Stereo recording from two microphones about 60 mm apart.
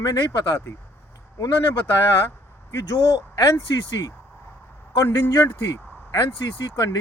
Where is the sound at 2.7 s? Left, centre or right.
Left.